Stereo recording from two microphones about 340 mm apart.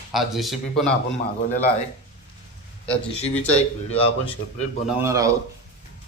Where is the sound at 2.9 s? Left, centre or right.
Centre.